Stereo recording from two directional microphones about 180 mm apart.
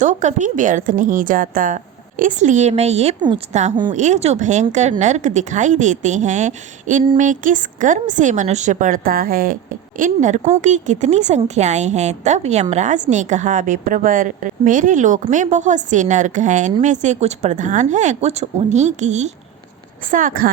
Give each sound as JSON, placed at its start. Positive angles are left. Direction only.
{"t": 0.0, "sound": "a woman's voice", "side_deg": -40}
{"t": 3.2, "sound": "a woman's voice", "side_deg": -25}
{"t": 3.5, "sound": "a woman's voice", "side_deg": -40}